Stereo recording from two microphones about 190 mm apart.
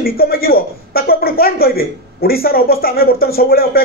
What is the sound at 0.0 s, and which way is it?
A man's voice, 50° left (ahead or behind).